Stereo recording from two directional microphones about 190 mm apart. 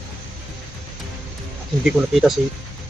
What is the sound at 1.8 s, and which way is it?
Speech, centre (ahead or behind).